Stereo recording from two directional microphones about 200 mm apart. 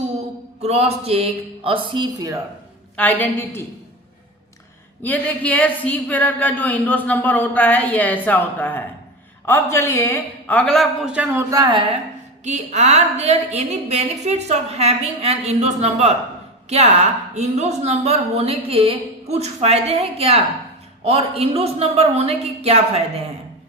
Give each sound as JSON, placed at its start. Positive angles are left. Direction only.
{"t": 0.6, "sound": "speech", "side_deg": -30}
{"t": 2.9, "sound": "speech", "side_deg": 10}
{"t": 5.0, "sound": "speech", "side_deg": 10}
{"t": 11.5, "sound": "speech", "side_deg": -20}
{"t": 12.5, "sound": "a woman's voice", "side_deg": -35}